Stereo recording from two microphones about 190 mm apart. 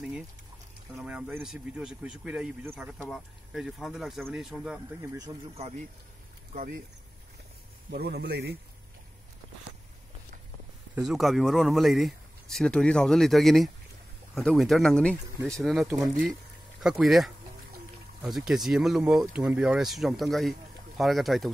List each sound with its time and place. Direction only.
0.9 s speech: 5° right (ahead or behind)
6.5 s speech: 50° right (ahead or behind)
7.9 s a man's voice: 60° right (ahead or behind)
11.0 s speech: centre (ahead or behind)